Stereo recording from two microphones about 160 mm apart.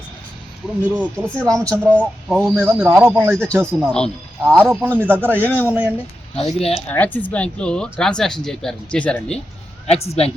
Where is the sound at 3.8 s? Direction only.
5° left (ahead or behind).